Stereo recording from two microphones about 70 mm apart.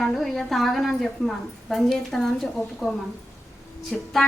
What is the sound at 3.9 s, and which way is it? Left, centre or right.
Speech, centre.